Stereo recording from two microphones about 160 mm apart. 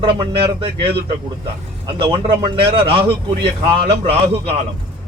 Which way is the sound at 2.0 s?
30° right (ahead or behind).